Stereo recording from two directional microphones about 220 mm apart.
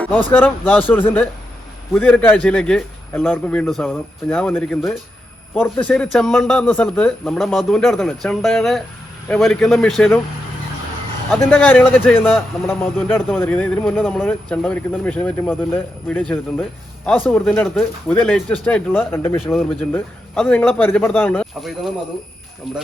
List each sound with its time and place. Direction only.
0.3 s a man's voice: 10° left (ahead or behind)
11.3 s a man's voice: 10° left (ahead or behind)